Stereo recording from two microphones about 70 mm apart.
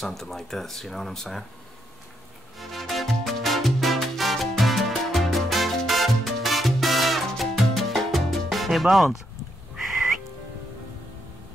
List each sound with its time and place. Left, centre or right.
0.0 s speech: centre
2.6 s music: centre